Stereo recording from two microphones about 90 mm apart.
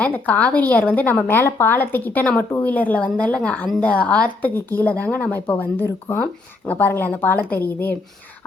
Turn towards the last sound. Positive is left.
turn(degrees=25)  # may be behind; listen again after turning